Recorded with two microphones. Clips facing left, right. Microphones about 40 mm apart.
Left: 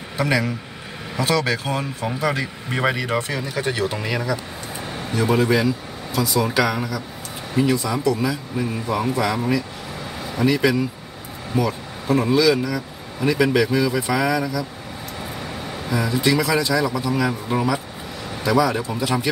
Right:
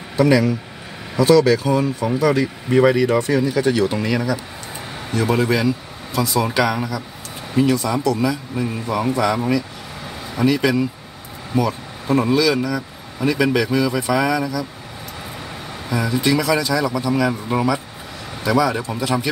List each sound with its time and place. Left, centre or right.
0.2 s speech: centre
3.9 s speech: centre
8.0 s speech: centre
15.9 s a man's voice: centre